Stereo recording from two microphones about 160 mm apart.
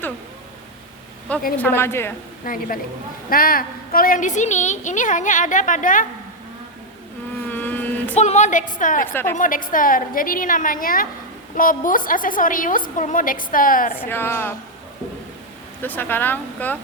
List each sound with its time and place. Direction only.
1.5 s speech: 15° left (ahead or behind)
2.4 s a woman's voice: 60° left (ahead or behind)
7.4 s a sound: 10° left (ahead or behind)
8.2 s a woman's voice: 45° left (ahead or behind)
9.0 s speech: 15° left (ahead or behind)
9.4 s a woman's voice: 60° left (ahead or behind)
13.9 s speech: 10° left (ahead or behind)
15.8 s speech: 10° left (ahead or behind)